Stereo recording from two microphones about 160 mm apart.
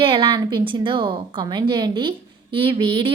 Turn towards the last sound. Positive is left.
turn(degrees=-30)  # may be behind; listen again after turning